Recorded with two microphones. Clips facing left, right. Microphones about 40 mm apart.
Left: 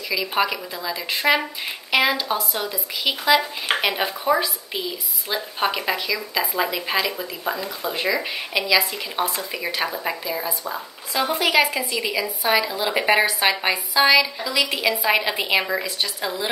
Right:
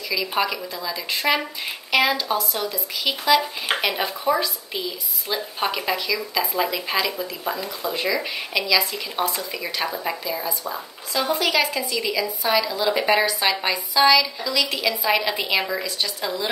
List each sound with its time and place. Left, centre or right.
0.1 s speech: centre
11.2 s speech: left